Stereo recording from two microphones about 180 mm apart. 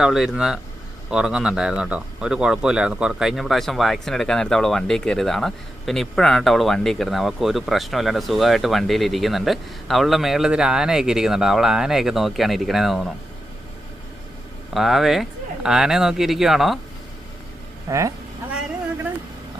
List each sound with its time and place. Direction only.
0.0 s speech: centre (ahead or behind)
14.7 s speech: centre (ahead or behind)
17.8 s speech: 15° right (ahead or behind)